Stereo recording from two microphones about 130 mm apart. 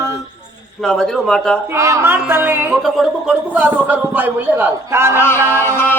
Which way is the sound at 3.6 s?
15° right (ahead or behind).